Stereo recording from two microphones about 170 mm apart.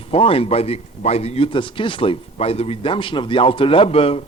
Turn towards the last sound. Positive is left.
turn(degrees=35)  # may be behind; listen again after turning